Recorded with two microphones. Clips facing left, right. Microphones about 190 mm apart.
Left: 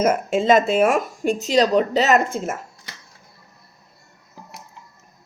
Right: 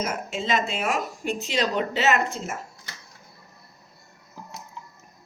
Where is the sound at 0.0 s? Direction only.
50° left (ahead or behind).